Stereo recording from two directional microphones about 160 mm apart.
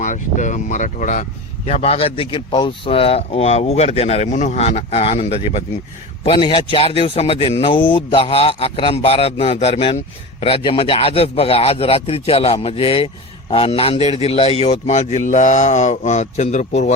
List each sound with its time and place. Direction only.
0.0 s a man's voice: 50° left (ahead or behind)